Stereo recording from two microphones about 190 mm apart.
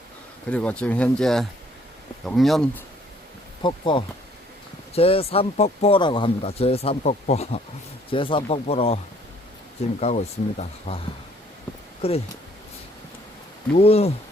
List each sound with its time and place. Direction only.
0.5 s speech: 5° left (ahead or behind)
3.6 s speech: 25° left (ahead or behind)
10.0 s speech: 35° left (ahead or behind)
12.0 s speech: 30° left (ahead or behind)
13.7 s speech: 35° left (ahead or behind)